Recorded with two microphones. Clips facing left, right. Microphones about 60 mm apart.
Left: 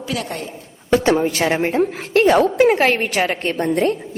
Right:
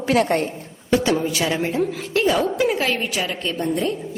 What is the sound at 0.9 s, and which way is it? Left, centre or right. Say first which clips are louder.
A woman's voice: left 3 dB; left.